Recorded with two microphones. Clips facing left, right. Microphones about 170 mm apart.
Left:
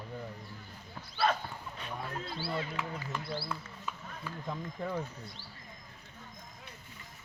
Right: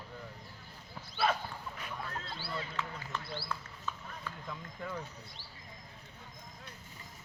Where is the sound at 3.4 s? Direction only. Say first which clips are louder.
Left 2 dB; 15° left (ahead or behind).